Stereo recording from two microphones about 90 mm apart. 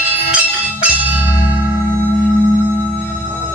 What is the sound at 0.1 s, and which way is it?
Music, 15° right (ahead or behind).